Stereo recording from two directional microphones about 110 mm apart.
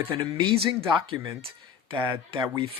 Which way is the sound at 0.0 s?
50° right (ahead or behind).